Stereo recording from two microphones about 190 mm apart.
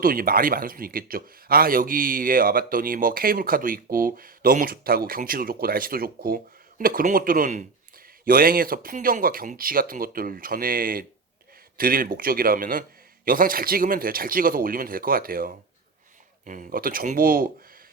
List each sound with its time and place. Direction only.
0.0 s speech: 50° right (ahead or behind)